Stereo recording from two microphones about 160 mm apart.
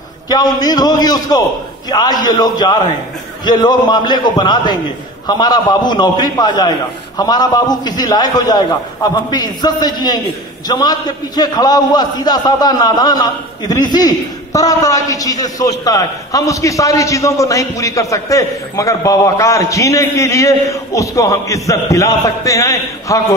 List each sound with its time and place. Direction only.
0.3 s a man's voice: 25° left (ahead or behind)